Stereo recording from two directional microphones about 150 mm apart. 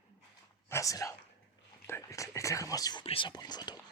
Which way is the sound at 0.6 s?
20° left (ahead or behind).